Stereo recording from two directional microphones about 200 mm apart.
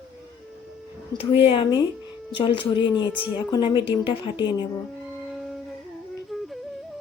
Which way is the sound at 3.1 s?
5° right (ahead or behind).